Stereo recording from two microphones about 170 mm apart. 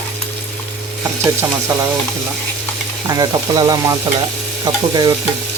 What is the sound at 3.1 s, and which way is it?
Speech, 20° right (ahead or behind).